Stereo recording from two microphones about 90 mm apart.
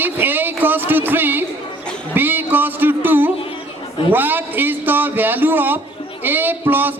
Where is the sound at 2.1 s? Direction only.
20° right (ahead or behind).